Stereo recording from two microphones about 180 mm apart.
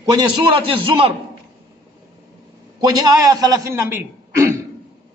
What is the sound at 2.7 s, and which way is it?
A man's voice, 20° right (ahead or behind).